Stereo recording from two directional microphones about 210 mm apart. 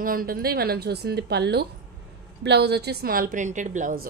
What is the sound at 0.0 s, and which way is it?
A woman's voice, 45° right (ahead or behind).